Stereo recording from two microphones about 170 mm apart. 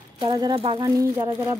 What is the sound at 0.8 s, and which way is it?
Speech, 15° right (ahead or behind).